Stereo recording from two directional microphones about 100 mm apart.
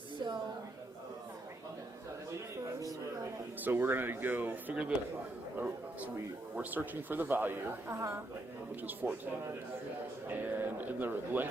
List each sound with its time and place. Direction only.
3.6 s speech: 20° right (ahead or behind)
10.2 s speech: 20° right (ahead or behind)